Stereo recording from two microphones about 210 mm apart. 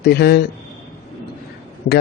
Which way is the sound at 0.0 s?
50° left (ahead or behind).